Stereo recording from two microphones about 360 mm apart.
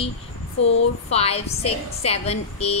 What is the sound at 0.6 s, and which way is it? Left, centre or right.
Speech, left.